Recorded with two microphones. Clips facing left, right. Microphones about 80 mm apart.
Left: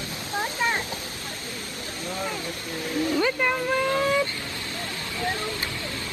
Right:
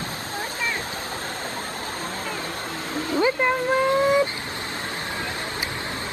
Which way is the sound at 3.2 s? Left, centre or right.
Centre.